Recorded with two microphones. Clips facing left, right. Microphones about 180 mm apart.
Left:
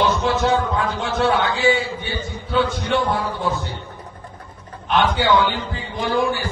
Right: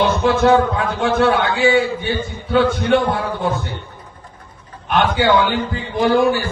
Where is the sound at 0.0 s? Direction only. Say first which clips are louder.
Right 4 dB; 55° right (ahead or behind).